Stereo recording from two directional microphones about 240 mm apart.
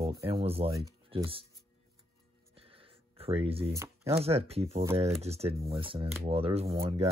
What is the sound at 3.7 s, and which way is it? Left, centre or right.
Speech, centre.